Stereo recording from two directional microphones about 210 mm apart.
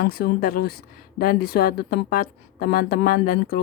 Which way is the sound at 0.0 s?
45° left (ahead or behind).